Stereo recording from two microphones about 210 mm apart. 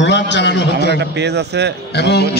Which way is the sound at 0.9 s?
55° right (ahead or behind).